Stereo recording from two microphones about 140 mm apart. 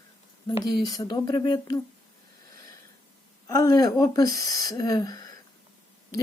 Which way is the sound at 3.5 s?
25° left (ahead or behind).